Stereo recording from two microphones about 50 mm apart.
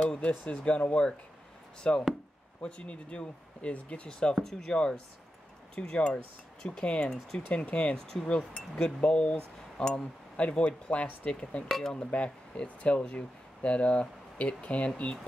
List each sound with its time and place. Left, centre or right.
0.5 s speech: left; by 4.7 s centre
4.7 s speech: centre
12.1 s speech: left